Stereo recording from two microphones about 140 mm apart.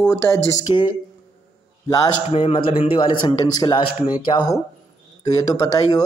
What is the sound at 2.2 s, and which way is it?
A man's voice, 45° left (ahead or behind).